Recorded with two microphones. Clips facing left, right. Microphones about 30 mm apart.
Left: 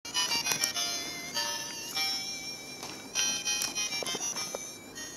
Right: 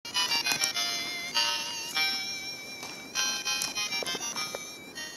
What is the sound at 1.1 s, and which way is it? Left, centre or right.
Music, right.